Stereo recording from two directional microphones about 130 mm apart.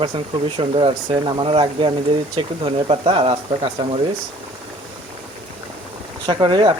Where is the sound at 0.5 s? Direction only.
45° right (ahead or behind).